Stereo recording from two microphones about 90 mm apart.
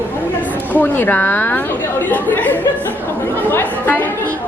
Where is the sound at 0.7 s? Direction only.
20° left (ahead or behind).